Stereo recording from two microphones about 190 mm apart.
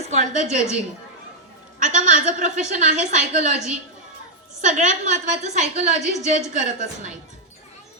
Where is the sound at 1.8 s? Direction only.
40° right (ahead or behind).